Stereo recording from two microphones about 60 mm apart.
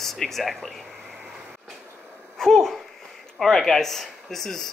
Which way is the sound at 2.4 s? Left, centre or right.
Centre.